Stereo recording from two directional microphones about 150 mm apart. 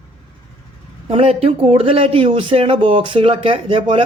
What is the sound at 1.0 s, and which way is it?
A man's voice, 40° right (ahead or behind).